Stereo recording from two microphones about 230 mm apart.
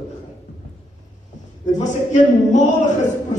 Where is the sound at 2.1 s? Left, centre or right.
Left.